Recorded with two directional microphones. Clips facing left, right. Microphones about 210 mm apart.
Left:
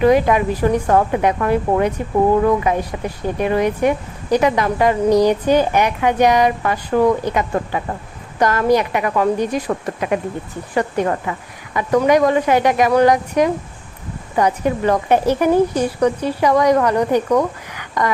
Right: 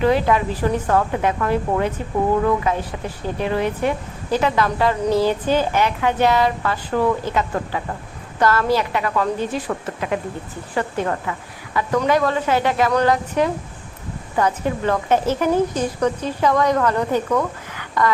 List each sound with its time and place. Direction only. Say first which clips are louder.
0.0 s a woman's voice: left 4 dB; 15° left (ahead or behind)